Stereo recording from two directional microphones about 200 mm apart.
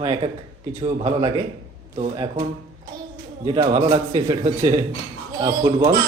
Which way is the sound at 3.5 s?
20° right (ahead or behind).